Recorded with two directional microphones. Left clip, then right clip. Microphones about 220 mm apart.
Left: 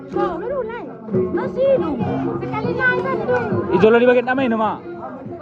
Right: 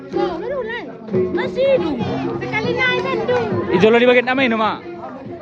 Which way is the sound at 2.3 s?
35° right (ahead or behind).